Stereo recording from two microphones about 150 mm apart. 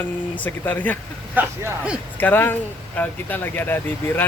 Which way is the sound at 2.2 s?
15° left (ahead or behind).